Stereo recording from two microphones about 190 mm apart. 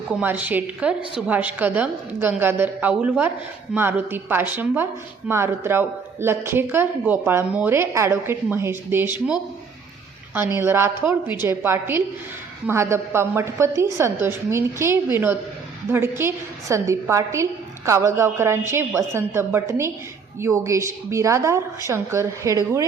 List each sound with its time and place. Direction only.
0.1 s a woman's voice: 10° right (ahead or behind)
10.3 s a woman's voice: 10° right (ahead or behind)